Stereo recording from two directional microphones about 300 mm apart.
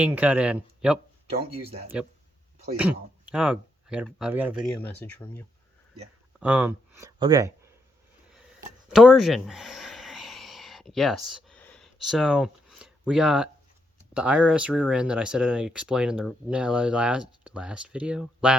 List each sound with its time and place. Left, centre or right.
0.0 s speech: centre
1.6 s speech: centre
3.3 s speech: centre
4.8 s speech: centre
6.4 s speech: centre
8.9 s a sound: centre
14.1 s speech: centre